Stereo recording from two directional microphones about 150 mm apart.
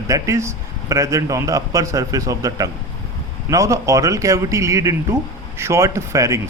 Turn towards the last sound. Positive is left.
turn(degrees=-20)  # may be behind; listen again after turning